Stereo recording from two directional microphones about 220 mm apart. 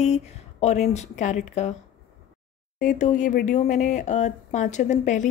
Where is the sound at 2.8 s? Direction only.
35° left (ahead or behind).